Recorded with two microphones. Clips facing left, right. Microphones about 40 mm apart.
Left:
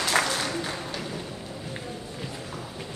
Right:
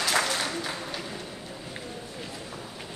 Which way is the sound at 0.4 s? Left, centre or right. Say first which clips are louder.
Left 1 dB; centre.